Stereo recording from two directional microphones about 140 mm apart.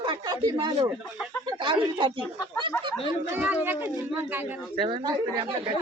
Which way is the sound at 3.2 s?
15° right (ahead or behind).